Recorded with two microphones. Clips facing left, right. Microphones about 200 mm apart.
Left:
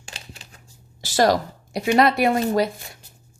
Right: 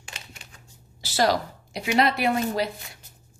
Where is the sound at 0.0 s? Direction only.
30° left (ahead or behind).